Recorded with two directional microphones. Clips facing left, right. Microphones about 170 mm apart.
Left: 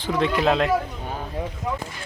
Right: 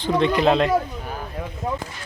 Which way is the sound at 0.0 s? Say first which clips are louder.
Right 3 dB; 5° left (ahead or behind).